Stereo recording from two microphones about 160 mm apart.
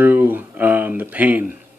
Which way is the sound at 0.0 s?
10° right (ahead or behind).